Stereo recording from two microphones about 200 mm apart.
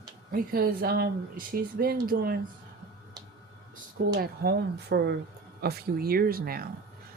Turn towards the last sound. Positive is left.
turn(degrees=-50)  # may be behind; listen again after turning